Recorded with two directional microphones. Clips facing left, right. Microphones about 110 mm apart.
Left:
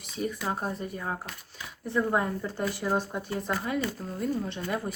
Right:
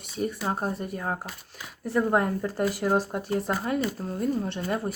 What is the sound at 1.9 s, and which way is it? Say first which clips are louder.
Speech: right 3 dB; 40° right (ahead or behind).